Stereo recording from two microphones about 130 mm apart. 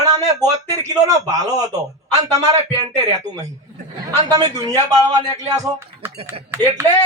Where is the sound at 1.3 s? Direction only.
30° right (ahead or behind).